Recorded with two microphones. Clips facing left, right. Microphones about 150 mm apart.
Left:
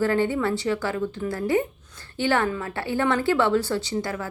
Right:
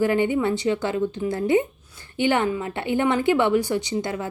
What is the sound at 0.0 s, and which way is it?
A woman's voice, 15° right (ahead or behind).